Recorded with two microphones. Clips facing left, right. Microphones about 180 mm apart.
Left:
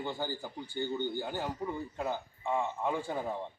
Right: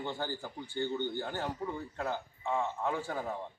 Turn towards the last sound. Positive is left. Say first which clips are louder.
# left 1 dB
turn(degrees=15)  # may be behind; listen again after turning